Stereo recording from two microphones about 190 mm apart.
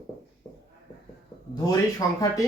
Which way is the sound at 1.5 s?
20° left (ahead or behind).